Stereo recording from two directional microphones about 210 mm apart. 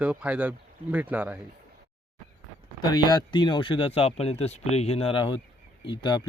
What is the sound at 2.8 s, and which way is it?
Speech, 20° left (ahead or behind).